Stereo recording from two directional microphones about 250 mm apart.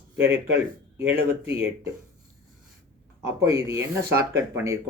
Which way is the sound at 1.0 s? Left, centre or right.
Centre.